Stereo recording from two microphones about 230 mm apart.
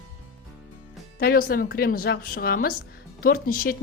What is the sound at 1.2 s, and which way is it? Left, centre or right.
A woman's voice, left.